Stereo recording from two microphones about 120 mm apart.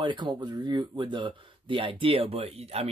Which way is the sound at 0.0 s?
40° right (ahead or behind).